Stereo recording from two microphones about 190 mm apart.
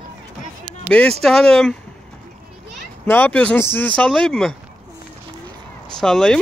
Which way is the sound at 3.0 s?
10° left (ahead or behind).